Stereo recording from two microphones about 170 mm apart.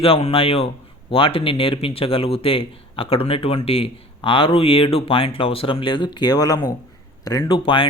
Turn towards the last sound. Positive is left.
turn(degrees=30)  # may be behind; listen again after turning